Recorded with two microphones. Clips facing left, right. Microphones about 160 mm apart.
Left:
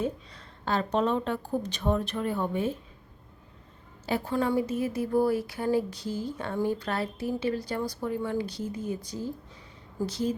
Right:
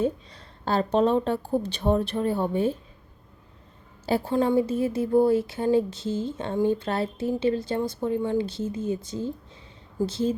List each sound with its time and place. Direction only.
0.0 s a woman's voice: 30° right (ahead or behind)
4.0 s speech: 30° right (ahead or behind)